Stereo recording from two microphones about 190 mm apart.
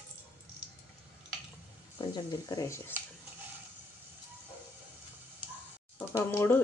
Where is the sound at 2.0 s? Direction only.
20° left (ahead or behind).